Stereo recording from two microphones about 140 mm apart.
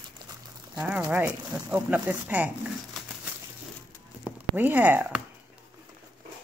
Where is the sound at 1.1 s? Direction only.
15° right (ahead or behind).